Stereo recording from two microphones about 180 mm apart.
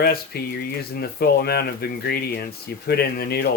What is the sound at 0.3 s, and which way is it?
Speech, 60° left (ahead or behind).